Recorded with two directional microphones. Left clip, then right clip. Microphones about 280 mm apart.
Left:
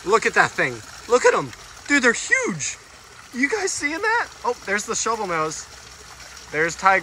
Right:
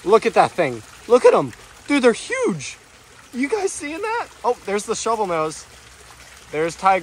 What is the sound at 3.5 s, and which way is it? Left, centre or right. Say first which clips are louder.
Speech: even; centre.